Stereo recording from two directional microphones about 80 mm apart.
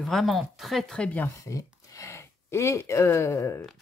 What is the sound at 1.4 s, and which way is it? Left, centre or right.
Speech, left.